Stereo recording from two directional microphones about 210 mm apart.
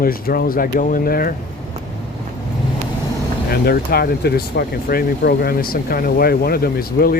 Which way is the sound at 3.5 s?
45° left (ahead or behind).